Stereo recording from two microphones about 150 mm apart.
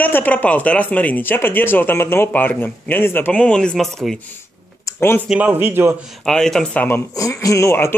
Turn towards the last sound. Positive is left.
turn(degrees=15)  # may be behind; listen again after turning